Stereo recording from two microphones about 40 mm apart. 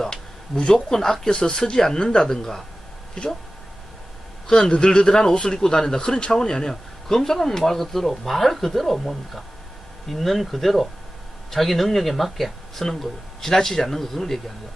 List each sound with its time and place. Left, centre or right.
0.0 s a sound: centre
0.6 s speech: centre
4.4 s speech: left